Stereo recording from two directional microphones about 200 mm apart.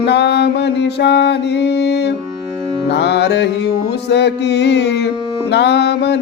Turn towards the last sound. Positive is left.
turn(degrees=55)  # may be behind; listen again after turning